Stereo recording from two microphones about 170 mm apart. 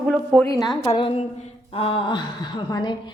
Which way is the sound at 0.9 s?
35° left (ahead or behind).